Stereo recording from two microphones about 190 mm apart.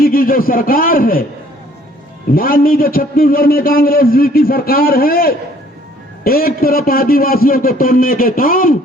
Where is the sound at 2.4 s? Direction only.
50° left (ahead or behind).